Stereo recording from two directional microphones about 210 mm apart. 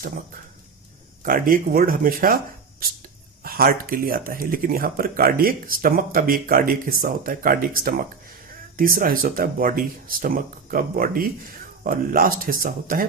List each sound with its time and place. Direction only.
1.2 s speech: 40° right (ahead or behind)
3.4 s speech: 45° right (ahead or behind)